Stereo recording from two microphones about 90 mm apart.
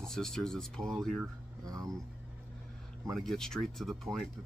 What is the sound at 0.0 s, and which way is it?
Speech, 5° left (ahead or behind).